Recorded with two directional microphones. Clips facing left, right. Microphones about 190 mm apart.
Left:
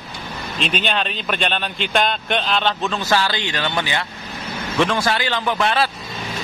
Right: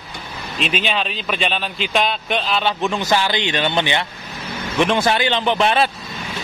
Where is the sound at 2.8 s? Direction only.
15° right (ahead or behind).